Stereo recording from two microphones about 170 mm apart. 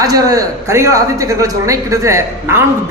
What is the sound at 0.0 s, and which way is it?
A man's voice, 20° right (ahead or behind).